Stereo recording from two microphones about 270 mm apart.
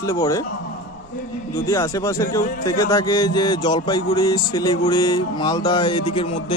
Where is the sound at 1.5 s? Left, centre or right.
Centre.